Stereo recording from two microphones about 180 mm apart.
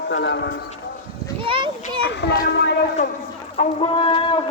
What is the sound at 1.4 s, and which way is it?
Speech, 30° right (ahead or behind).